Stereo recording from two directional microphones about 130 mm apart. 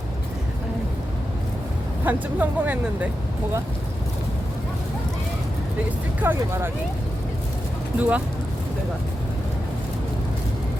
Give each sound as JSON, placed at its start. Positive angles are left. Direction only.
{"t": 2.0, "sound": "speech", "side_deg": -10}
{"t": 6.3, "sound": "speech", "side_deg": -20}
{"t": 7.9, "sound": "speech", "side_deg": -10}